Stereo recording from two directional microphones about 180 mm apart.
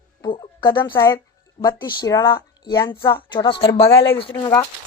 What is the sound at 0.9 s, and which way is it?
A woman's voice, 15° left (ahead or behind).